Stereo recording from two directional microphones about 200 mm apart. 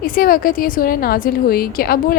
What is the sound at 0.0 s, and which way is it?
A woman's voice, 45° left (ahead or behind).